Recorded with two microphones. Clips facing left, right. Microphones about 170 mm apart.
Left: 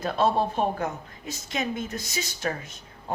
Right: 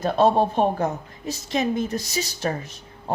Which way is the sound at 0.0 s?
40° right (ahead or behind).